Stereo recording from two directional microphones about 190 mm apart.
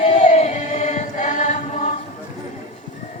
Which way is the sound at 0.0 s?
35° left (ahead or behind).